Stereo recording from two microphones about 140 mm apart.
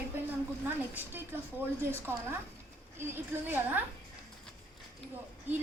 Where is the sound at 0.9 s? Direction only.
15° right (ahead or behind).